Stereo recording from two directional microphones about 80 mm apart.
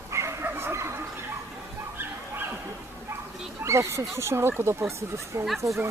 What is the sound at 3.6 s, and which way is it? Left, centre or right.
Speech, right.